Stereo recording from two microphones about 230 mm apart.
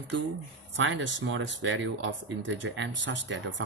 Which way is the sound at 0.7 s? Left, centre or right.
Right.